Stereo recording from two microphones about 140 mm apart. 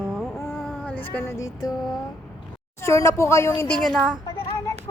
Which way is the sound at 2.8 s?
20° left (ahead or behind).